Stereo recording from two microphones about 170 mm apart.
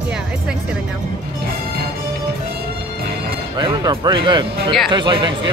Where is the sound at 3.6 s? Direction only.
25° right (ahead or behind).